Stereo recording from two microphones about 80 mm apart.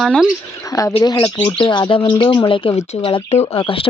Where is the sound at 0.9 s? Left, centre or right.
Left.